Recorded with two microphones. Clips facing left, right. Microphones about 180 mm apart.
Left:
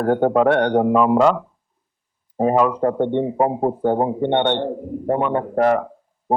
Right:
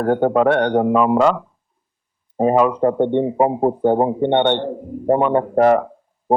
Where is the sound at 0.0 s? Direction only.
20° right (ahead or behind).